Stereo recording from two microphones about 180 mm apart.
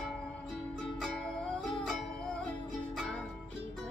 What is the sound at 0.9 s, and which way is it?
Music, 5° left (ahead or behind).